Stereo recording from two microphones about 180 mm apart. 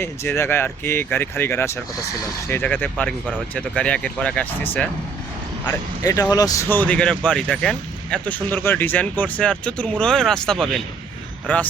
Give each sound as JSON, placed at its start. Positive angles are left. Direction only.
{"t": 0.0, "sound": "speech", "side_deg": 15}
{"t": 5.6, "sound": "speech", "side_deg": 20}